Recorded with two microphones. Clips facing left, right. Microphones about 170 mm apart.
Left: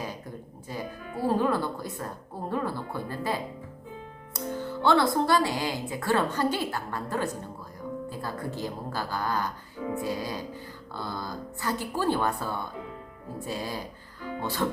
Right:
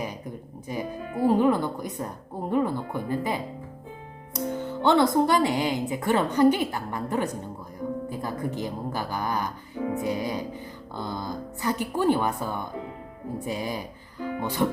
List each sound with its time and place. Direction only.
0.0 s speech: 15° right (ahead or behind)
9.9 s music: 20° right (ahead or behind)
10.9 s speech: 20° right (ahead or behind)